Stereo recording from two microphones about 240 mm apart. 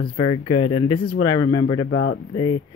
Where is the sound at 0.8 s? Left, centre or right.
Left.